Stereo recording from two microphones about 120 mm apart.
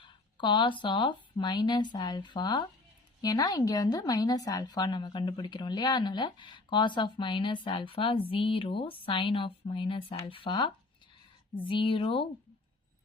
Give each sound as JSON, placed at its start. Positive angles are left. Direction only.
{"t": 0.0, "sound": "speech", "side_deg": 40}